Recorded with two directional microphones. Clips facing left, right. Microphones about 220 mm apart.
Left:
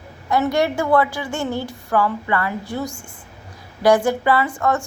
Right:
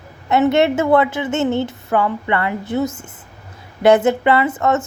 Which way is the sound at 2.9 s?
5° right (ahead or behind).